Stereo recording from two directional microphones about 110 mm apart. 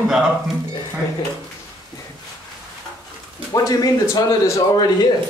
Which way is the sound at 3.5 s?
35° left (ahead or behind).